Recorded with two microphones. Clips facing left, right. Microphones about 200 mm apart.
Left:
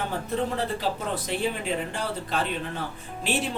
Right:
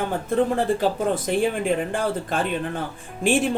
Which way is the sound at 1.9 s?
50° right (ahead or behind).